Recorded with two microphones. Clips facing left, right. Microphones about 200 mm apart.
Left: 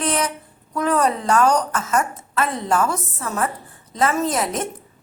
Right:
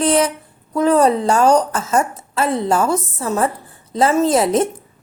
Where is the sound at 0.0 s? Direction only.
30° right (ahead or behind).